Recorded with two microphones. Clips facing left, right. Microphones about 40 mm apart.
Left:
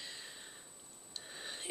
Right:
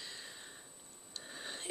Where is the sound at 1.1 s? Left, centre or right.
Centre.